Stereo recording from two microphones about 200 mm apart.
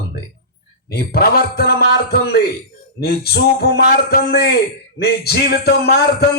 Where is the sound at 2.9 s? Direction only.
50° left (ahead or behind).